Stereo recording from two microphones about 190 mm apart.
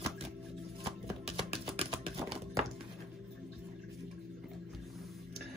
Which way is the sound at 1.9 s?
25° right (ahead or behind).